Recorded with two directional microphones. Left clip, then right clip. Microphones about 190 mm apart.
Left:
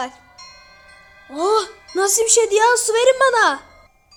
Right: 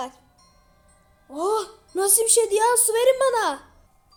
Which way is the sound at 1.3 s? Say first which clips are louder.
Left 6 dB; 10° left (ahead or behind).